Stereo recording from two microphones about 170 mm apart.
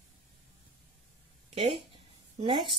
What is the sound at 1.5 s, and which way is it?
A woman's voice, 35° right (ahead or behind).